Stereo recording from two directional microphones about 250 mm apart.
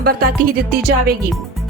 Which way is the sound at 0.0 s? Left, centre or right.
Right.